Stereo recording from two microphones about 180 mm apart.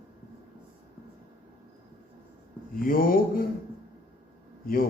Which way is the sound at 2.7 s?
50° left (ahead or behind).